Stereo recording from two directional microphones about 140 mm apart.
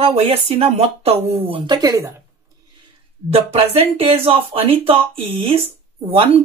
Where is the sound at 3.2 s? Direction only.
45° right (ahead or behind).